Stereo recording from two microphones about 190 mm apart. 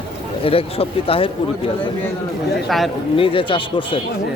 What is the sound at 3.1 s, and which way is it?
Speech, 30° left (ahead or behind).